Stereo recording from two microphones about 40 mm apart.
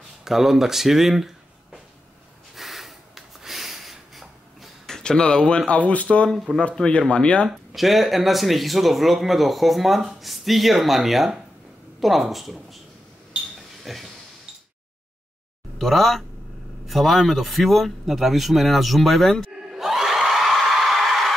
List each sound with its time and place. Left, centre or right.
0.2 s speech: centre
2.5 s snort: centre
4.8 s speech: centre
5.7 s speech: left
7.4 s speech: centre
13.6 s a sound: centre
15.8 s speech: centre
16.8 s a sound: centre